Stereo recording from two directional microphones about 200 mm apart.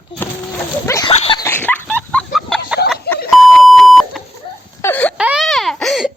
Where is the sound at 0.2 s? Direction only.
10° left (ahead or behind).